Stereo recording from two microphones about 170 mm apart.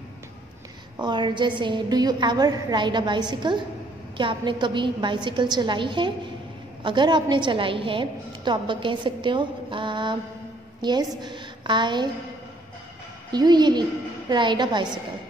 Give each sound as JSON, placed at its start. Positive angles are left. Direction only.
{"t": 1.0, "sound": "a woman's voice", "side_deg": -25}
{"t": 13.3, "sound": "a woman's voice", "side_deg": -25}